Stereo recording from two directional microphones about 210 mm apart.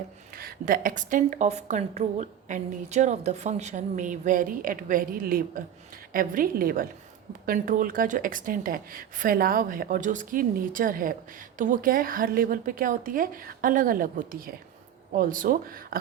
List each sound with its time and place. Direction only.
0.3 s speech: 45° right (ahead or behind)